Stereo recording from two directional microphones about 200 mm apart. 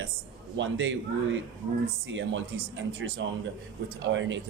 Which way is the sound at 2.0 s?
65° right (ahead or behind).